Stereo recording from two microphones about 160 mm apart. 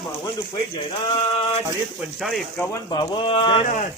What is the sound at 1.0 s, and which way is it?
Speech, 35° left (ahead or behind).